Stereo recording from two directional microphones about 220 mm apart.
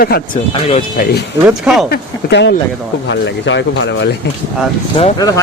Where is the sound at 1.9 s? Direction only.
50° left (ahead or behind).